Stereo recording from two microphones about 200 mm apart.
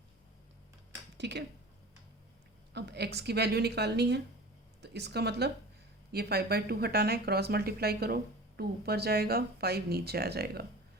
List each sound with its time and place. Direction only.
1.2 s a woman's voice: 60° right (ahead or behind)
2.7 s a woman's voice: 55° right (ahead or behind)